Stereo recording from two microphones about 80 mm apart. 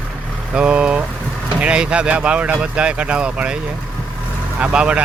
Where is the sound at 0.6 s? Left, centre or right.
Centre.